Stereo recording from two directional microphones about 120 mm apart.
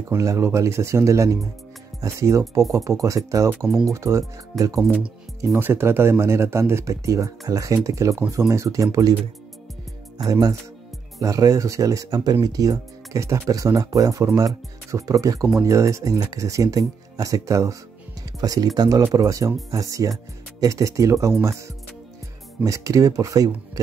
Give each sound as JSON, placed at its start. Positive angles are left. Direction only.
{"t": 0.1, "sound": "speech", "side_deg": -25}
{"t": 10.1, "sound": "speech", "side_deg": -30}